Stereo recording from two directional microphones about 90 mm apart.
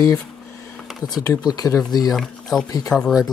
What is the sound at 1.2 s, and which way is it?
Speech, 45° left (ahead or behind).